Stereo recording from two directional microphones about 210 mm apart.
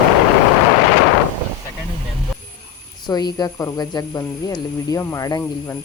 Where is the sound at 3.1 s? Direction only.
20° left (ahead or behind).